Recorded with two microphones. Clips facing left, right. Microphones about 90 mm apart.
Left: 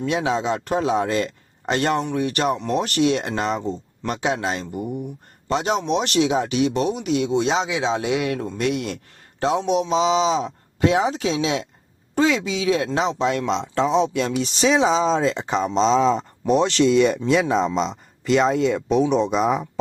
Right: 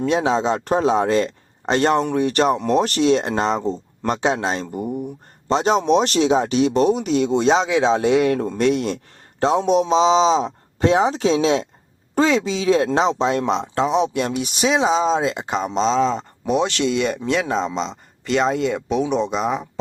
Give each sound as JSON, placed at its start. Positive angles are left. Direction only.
{"t": 0.0, "sound": "speech", "side_deg": -30}
{"t": 13.8, "sound": "speech", "side_deg": -15}
{"t": 14.7, "sound": "speech", "side_deg": 0}